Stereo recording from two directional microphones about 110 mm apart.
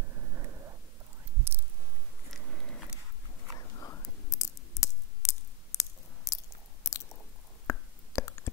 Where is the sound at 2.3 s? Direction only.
5° left (ahead or behind).